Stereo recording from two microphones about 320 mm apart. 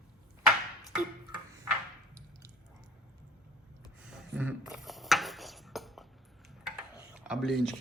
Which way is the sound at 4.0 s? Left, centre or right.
Centre.